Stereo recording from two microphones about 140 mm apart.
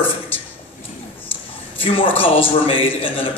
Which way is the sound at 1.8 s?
40° left (ahead or behind).